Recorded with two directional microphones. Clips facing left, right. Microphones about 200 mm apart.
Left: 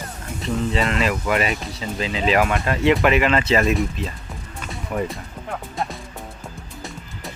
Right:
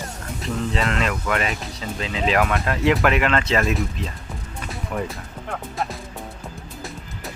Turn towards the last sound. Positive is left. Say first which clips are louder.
# even
turn(degrees=0)  # may be behind; listen again after turning